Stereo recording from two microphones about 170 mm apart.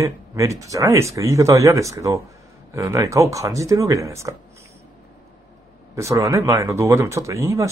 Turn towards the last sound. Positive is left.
turn(degrees=-20)  # may be behind; listen again after turning